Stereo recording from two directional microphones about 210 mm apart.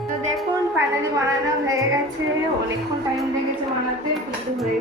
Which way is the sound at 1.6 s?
15° right (ahead or behind).